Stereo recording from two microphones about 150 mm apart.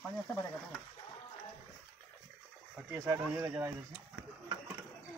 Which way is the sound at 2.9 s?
10° right (ahead or behind).